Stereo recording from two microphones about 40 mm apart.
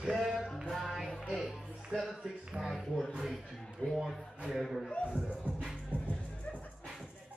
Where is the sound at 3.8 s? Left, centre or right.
Left.